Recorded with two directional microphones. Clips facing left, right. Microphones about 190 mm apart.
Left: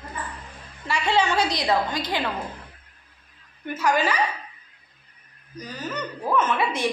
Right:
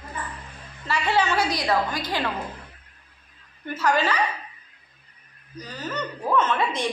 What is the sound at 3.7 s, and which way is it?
Speech, 15° left (ahead or behind).